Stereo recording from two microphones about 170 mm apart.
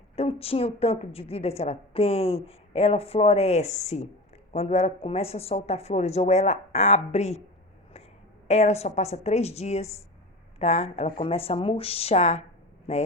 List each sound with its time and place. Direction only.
0.2 s a woman's voice: 35° left (ahead or behind)
8.4 s a woman's voice: 40° left (ahead or behind)